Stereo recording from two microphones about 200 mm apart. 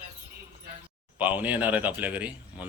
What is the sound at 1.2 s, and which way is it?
Speech, 10° right (ahead or behind).